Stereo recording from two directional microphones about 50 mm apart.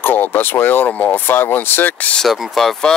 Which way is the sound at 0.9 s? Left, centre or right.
Left.